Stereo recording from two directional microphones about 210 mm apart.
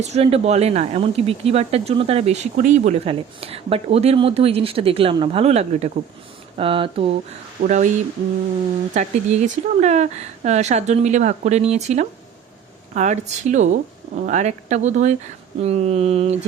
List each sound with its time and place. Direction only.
0.0 s speech: 30° right (ahead or behind)
7.6 s speech: 35° right (ahead or behind)
9.0 s speech: 35° right (ahead or behind)